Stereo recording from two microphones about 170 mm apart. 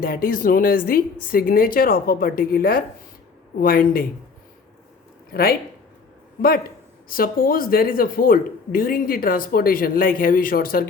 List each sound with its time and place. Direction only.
0.0 s speech: 60° left (ahead or behind)
5.3 s speech: 60° left (ahead or behind)
7.1 s speech: 60° left (ahead or behind)